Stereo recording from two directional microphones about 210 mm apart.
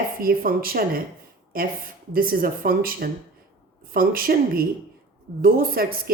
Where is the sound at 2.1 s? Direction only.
45° right (ahead or behind).